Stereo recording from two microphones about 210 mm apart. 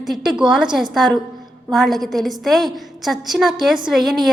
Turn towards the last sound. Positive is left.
turn(degrees=0)  # may be behind; listen again after turning